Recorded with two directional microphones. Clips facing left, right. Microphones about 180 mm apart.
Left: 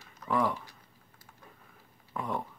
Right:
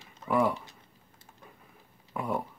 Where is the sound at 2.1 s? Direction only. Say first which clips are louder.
Right 3 dB; 10° right (ahead or behind).